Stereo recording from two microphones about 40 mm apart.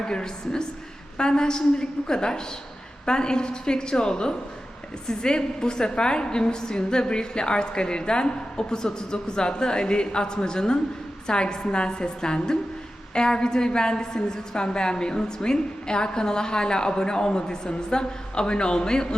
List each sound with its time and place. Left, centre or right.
0.0 s a woman's voice: centre